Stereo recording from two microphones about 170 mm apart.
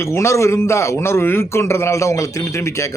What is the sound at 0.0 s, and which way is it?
A man's voice, 15° left (ahead or behind).